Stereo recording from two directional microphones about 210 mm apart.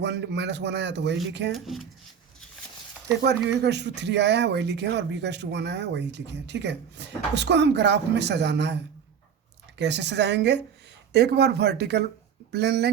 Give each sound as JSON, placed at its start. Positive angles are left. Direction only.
{"t": 0.0, "sound": "speech", "side_deg": -55}
{"t": 1.5, "sound": "speech", "side_deg": 0}
{"t": 3.2, "sound": "speech", "side_deg": -55}